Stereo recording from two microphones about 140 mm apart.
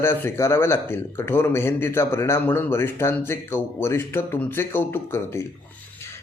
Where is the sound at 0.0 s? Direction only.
15° left (ahead or behind).